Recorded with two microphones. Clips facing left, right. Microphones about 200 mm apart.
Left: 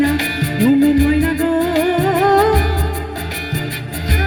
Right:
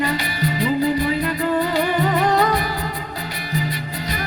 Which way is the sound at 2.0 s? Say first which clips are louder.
Left 5 dB; 45° left (ahead or behind).